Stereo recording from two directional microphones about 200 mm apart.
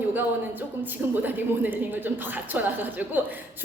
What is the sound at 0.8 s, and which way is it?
A woman's voice, 10° right (ahead or behind).